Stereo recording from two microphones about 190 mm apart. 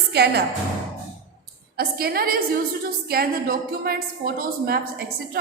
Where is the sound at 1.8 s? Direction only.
55° right (ahead or behind).